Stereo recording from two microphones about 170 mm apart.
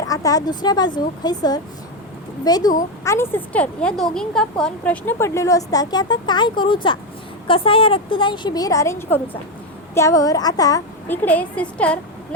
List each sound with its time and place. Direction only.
0.1 s a woman's voice: 20° left (ahead or behind)